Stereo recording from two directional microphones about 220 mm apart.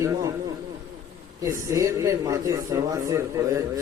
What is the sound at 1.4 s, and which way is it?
A man's voice, 15° right (ahead or behind).